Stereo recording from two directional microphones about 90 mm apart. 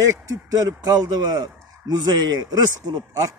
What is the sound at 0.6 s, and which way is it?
Speech, 45° right (ahead or behind).